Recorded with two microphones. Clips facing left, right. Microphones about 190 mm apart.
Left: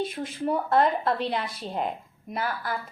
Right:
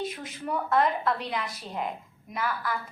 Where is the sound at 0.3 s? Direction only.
30° left (ahead or behind).